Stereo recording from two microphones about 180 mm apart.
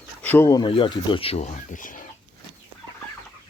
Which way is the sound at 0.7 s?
30° left (ahead or behind).